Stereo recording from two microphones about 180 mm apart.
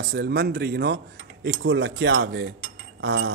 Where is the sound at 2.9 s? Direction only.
90° right.